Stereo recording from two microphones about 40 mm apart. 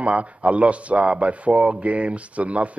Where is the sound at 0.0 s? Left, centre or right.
Right.